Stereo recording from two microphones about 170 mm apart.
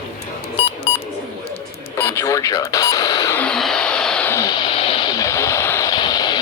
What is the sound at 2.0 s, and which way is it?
Radio, 15° left (ahead or behind).